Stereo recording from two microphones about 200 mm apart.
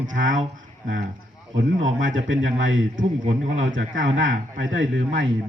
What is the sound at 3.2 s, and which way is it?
Speech, 35° right (ahead or behind).